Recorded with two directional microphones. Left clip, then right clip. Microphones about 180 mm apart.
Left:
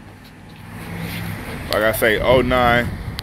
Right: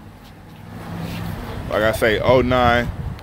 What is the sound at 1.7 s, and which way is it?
Speech, 5° left (ahead or behind).